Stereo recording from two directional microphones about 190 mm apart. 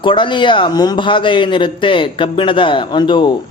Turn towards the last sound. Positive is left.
turn(degrees=25)  # may be behind; listen again after turning